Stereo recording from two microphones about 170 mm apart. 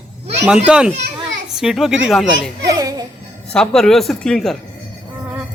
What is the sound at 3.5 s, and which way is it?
Speech, 5° left (ahead or behind).